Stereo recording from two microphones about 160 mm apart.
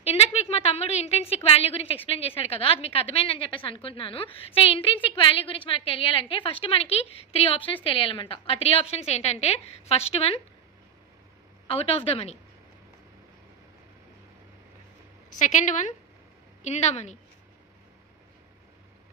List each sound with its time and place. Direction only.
0.0 s a sound: 40° left (ahead or behind)
2.0 s a woman's voice: 35° left (ahead or behind)
11.6 s a woman's voice: 40° left (ahead or behind)
15.3 s speech: 50° left (ahead or behind)